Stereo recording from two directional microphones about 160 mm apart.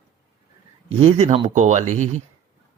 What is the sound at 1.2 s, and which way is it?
Speech, 45° right (ahead or behind).